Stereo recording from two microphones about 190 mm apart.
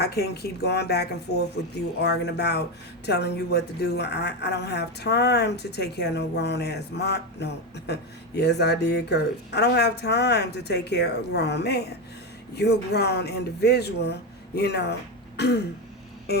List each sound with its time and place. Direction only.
0.0 s a woman's voice: 60° left (ahead or behind)